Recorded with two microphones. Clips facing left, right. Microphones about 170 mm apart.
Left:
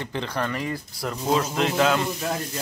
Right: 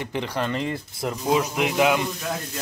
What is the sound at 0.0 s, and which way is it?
A man's voice, 15° right (ahead or behind).